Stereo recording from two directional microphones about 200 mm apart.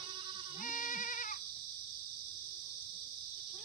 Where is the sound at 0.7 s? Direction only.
40° left (ahead or behind).